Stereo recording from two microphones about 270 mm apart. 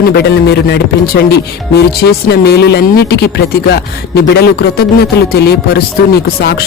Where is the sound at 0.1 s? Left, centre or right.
Left.